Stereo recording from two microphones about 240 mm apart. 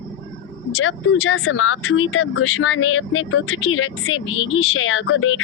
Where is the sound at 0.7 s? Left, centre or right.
Left.